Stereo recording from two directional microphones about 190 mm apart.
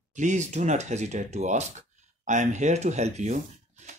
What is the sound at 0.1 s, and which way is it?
Speech, 40° right (ahead or behind).